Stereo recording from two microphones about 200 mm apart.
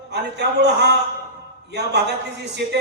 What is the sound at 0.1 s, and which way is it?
Speech, 55° right (ahead or behind).